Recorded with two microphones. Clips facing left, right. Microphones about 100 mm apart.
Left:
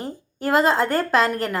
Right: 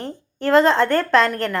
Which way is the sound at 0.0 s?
10° left (ahead or behind).